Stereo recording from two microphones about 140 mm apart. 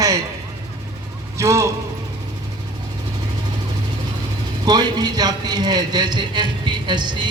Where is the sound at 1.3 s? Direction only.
20° right (ahead or behind).